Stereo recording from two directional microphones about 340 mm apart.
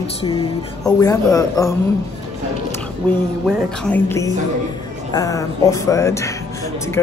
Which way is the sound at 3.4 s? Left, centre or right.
Centre.